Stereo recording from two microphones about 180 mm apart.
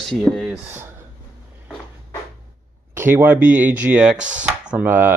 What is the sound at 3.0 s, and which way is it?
Speech, 10° right (ahead or behind).